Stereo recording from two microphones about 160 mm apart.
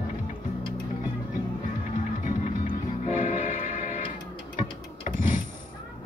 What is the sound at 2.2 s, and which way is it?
Music, 50° left (ahead or behind).